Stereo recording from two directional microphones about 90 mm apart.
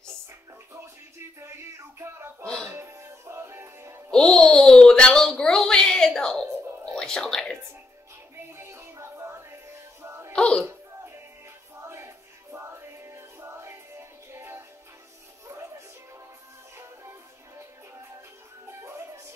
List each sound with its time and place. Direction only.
0.7 s music: 30° right (ahead or behind)
2.4 s music: 10° left (ahead or behind)
2.7 s music: 30° right (ahead or behind)
4.1 s a sound: 5° left (ahead or behind)
8.5 s music: 30° right (ahead or behind)
10.3 s music: 10° left (ahead or behind)
11.9 s music: 30° right (ahead or behind)
18.7 s music: 30° right (ahead or behind)